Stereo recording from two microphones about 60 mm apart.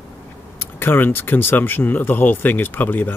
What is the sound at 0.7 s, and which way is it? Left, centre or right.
Speech, left.